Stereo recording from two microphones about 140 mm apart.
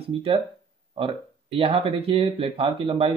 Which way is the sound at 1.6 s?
45° right (ahead or behind).